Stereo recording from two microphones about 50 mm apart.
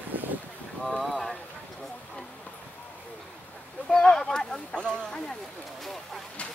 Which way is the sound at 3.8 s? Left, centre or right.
Centre.